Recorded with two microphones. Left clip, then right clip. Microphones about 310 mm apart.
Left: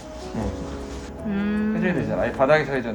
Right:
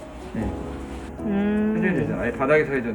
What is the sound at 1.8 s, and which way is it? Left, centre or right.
A man's voice, centre.